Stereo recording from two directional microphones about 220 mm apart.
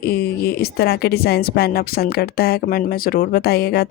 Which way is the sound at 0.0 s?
45° left (ahead or behind).